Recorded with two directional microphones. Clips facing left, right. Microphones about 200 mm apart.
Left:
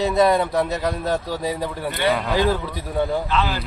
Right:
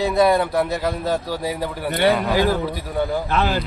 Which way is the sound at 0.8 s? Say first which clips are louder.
Right 1 dB; 5° right (ahead or behind).